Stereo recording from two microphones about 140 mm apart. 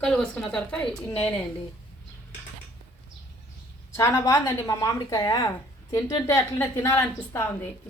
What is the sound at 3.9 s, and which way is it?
A woman's voice, 20° left (ahead or behind).